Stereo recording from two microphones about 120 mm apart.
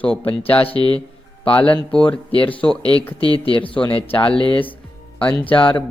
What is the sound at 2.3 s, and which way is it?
Speech, 45° left (ahead or behind).